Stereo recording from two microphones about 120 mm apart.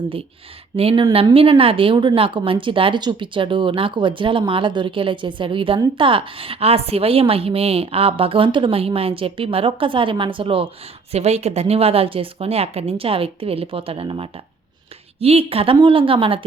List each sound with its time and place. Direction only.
0.8 s speech: 50° right (ahead or behind)
11.1 s speech: 60° right (ahead or behind)